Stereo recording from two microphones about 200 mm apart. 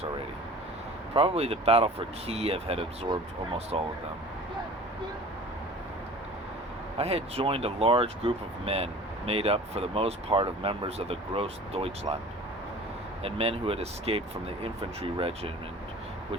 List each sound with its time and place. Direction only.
1.1 s speech: 30° right (ahead or behind)
7.0 s speech: 30° right (ahead or behind)
13.2 s speech: 30° right (ahead or behind)